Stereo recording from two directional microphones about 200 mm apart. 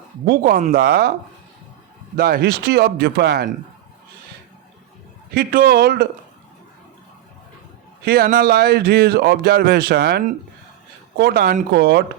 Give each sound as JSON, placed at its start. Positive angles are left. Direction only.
{"t": 0.3, "sound": "speech", "side_deg": -45}
{"t": 2.1, "sound": "speech", "side_deg": -50}
{"t": 5.3, "sound": "speech", "side_deg": -45}
{"t": 8.0, "sound": "speech", "side_deg": -50}